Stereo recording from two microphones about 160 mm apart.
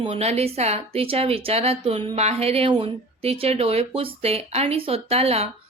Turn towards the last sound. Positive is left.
turn(degrees=-40)  # may be behind; listen again after turning